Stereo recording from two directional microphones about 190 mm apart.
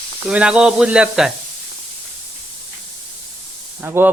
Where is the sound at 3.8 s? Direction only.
10° right (ahead or behind).